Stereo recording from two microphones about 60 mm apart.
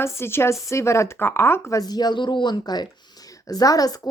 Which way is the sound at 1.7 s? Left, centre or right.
Left.